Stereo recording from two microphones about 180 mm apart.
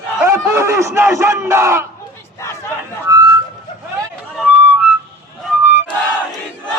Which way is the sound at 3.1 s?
15° right (ahead or behind).